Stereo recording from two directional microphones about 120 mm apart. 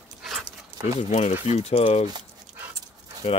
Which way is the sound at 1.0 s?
70° left (ahead or behind).